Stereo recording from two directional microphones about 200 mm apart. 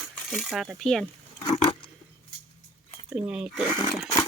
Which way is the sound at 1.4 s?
20° left (ahead or behind).